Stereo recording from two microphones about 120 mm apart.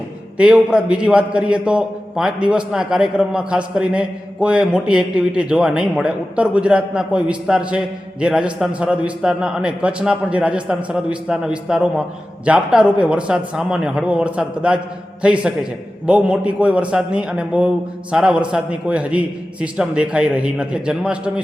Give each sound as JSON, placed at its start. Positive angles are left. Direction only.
{"t": 0.3, "sound": "a man's voice", "side_deg": -10}